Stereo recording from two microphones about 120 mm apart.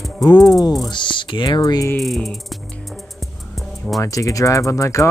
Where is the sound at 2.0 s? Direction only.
Centre (ahead or behind).